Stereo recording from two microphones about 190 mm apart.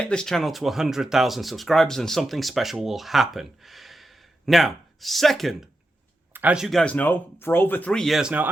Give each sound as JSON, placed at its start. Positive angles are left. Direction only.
{"t": 0.0, "sound": "speech", "side_deg": 5}